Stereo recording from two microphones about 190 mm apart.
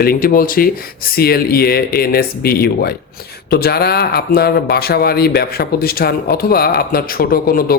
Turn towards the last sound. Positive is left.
turn(degrees=50)  # may be behind; listen again after turning